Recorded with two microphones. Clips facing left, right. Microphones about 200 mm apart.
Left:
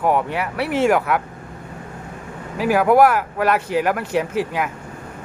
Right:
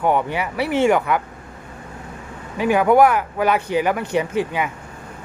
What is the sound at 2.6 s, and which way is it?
Speech, centre (ahead or behind).